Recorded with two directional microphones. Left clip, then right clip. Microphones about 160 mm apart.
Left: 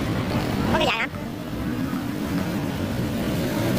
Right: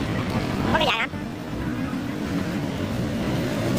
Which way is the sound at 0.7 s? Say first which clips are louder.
Right 1 dB; centre (ahead or behind).